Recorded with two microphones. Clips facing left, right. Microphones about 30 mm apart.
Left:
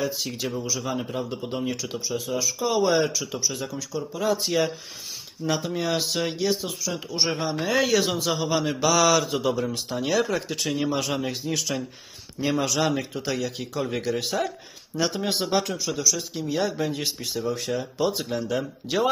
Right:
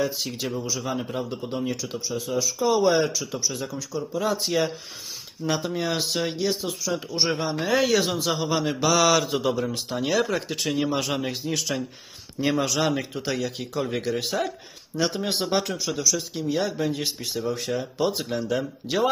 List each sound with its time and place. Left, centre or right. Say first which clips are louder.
0.0 s speech: right 1 dB; centre
5.5 s speech: even; centre